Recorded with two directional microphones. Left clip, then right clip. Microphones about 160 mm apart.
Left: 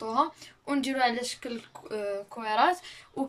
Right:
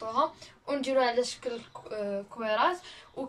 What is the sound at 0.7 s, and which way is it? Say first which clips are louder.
Speech: even; 50° left (ahead or behind).